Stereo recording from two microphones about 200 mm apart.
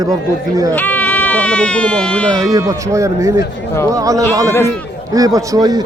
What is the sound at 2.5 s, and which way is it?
A man's voice, 15° right (ahead or behind).